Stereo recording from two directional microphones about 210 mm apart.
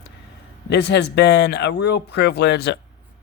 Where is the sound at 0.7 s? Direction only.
55° left (ahead or behind).